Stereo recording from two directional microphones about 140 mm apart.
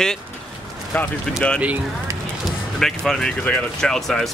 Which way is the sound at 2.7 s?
5° left (ahead or behind).